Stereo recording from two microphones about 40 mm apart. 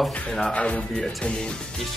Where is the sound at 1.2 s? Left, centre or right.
Left.